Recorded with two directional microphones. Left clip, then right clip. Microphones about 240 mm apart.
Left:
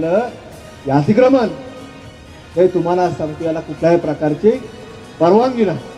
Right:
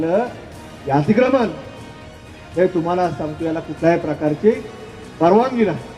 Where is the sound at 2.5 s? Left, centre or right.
Left.